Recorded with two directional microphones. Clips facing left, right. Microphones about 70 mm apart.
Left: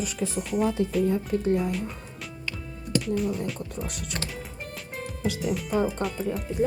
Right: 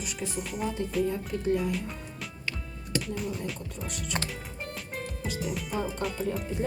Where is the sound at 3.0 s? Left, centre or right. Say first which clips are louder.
Left 6 dB; centre.